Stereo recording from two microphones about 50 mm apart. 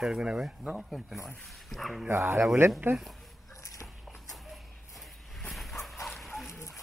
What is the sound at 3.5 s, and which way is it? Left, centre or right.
Walk, left.